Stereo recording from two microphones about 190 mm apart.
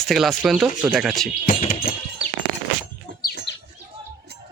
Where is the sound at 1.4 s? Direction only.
50° left (ahead or behind).